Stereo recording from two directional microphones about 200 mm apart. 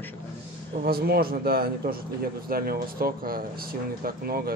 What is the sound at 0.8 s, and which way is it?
A man's voice, 50° right (ahead or behind).